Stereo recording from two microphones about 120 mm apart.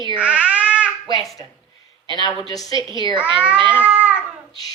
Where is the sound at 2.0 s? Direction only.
40° left (ahead or behind).